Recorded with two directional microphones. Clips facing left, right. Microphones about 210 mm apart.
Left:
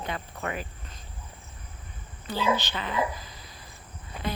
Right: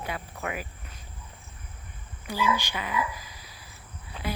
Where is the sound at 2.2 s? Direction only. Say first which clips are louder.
Left 1 dB; 10° right (ahead or behind).